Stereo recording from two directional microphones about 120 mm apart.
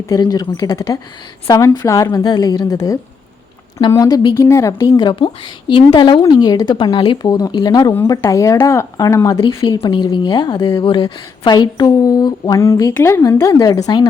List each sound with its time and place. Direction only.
0.1 s a woman's voice: 35° left (ahead or behind)
5.0 s a woman's voice: 45° left (ahead or behind); by 9.4 s 25° left (ahead or behind)
9.8 s a woman's voice: 40° left (ahead or behind)
12.9 s speech: 15° left (ahead or behind)
13.2 s a woman's voice: 30° left (ahead or behind)